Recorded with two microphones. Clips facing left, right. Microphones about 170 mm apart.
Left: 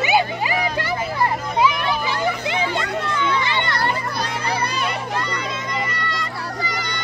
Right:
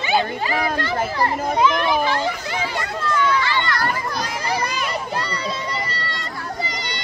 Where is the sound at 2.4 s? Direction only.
20° left (ahead or behind).